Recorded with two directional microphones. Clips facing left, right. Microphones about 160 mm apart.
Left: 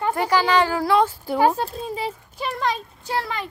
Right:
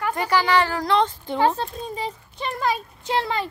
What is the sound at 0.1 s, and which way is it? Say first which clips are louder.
Speech: left 1 dB; 10° left (ahead or behind).